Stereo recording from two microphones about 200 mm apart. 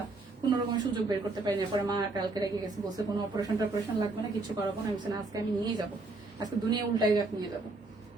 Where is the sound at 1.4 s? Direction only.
20° right (ahead or behind).